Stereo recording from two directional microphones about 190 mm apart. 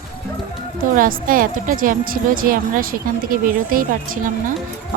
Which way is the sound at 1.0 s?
45° right (ahead or behind).